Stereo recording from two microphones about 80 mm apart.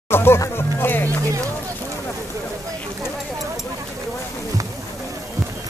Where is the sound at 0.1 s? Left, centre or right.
Left.